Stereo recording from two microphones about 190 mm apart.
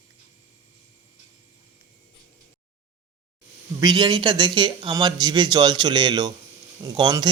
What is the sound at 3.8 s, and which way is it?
Speech, 25° right (ahead or behind).